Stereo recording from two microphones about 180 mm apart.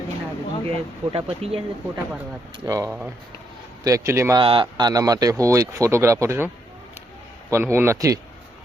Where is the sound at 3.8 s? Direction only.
15° right (ahead or behind).